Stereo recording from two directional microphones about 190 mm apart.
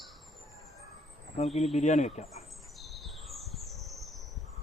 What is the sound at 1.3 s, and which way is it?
Speech, 35° left (ahead or behind).